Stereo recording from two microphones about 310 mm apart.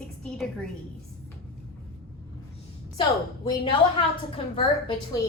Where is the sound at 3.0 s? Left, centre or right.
Centre.